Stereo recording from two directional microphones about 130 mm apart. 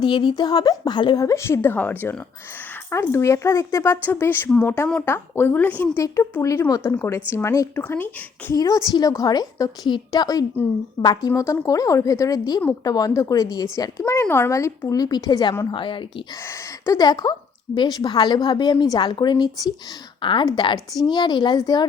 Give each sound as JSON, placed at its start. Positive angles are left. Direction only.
{"t": 0.0, "sound": "a woman's voice", "side_deg": 35}
{"t": 6.4, "sound": "a woman's voice", "side_deg": 25}
{"t": 7.8, "sound": "speech", "side_deg": 15}
{"t": 8.5, "sound": "a woman's voice", "side_deg": 30}
{"t": 16.8, "sound": "a woman's voice", "side_deg": 25}